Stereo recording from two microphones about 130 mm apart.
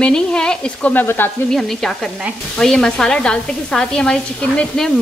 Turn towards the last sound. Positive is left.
turn(degrees=5)  # may be behind; listen again after turning